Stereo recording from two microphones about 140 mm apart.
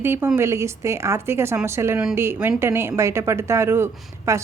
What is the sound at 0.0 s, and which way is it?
A woman's voice, 15° right (ahead or behind).